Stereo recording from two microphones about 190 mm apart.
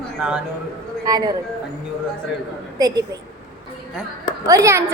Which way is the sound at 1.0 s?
20° right (ahead or behind).